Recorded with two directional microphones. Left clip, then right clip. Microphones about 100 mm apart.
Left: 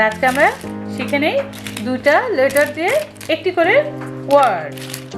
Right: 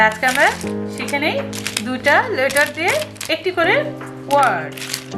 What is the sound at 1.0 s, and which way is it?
Speech, 40° left (ahead or behind).